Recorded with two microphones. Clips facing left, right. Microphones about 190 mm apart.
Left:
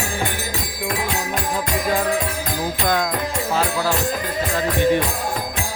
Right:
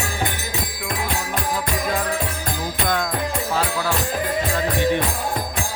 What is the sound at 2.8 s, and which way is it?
Music, 40° left (ahead or behind).